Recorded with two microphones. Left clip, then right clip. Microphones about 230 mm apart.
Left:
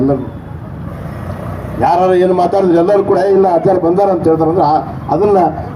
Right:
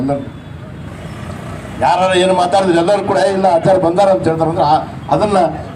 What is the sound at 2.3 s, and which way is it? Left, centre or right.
A man's voice, right.